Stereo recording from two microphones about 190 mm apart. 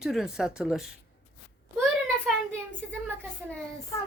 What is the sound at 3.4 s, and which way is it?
Speech, 5° right (ahead or behind).